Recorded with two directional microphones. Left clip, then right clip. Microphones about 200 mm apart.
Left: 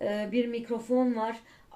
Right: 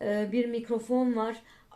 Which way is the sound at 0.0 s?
30° right (ahead or behind).